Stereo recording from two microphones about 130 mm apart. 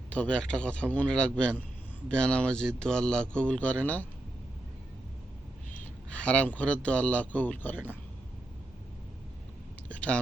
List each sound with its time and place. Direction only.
0.1 s a man's voice: 10° left (ahead or behind)
5.8 s a man's voice: 10° left (ahead or behind)
9.9 s a sound: 10° left (ahead or behind)